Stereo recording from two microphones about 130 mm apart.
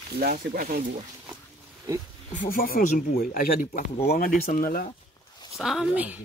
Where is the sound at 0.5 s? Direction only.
90° right.